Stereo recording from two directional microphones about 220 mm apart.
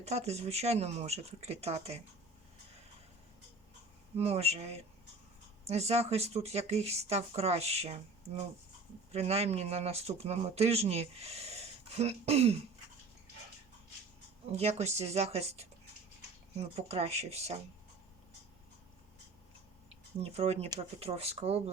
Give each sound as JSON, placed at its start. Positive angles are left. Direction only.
{"t": 0.0, "sound": "speech", "side_deg": -30}
{"t": 4.2, "sound": "speech", "side_deg": -30}
{"t": 5.6, "sound": "speech", "side_deg": -30}
{"t": 9.1, "sound": "speech", "side_deg": -30}
{"t": 14.6, "sound": "speech", "side_deg": -30}
{"t": 20.3, "sound": "speech", "side_deg": -30}